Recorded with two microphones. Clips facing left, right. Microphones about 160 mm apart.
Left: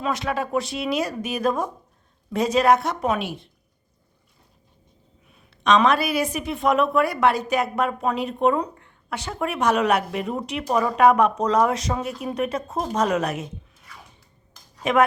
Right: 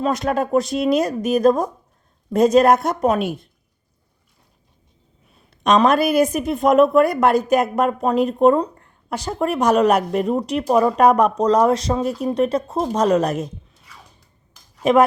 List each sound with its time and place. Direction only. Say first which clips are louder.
0.0 s speech: right 5 dB; 45° right (ahead or behind)
5.6 s a woman's voice: right 3 dB; 45° right (ahead or behind)
10.7 s speech: right 6 dB; 25° right (ahead or behind)
10.9 s a woman's voice: right 2 dB; 40° right (ahead or behind)